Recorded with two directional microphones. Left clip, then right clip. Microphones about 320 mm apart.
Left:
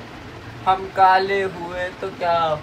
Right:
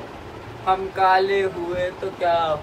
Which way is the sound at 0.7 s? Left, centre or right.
Centre.